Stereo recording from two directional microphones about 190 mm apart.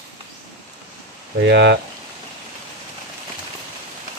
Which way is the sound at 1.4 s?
70° right (ahead or behind).